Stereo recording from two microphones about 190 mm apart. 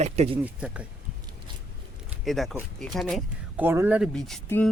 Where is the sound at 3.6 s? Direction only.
10° right (ahead or behind).